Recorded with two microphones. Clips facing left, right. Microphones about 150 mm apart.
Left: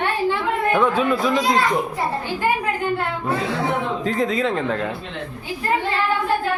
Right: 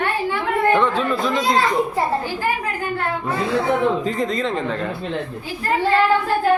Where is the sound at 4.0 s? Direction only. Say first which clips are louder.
Left 1 dB; centre (ahead or behind).